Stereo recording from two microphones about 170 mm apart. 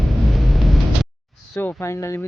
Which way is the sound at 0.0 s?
Centre (ahead or behind).